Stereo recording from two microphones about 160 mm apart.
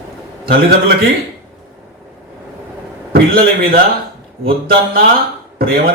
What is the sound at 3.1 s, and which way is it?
A man's voice, 65° right (ahead or behind).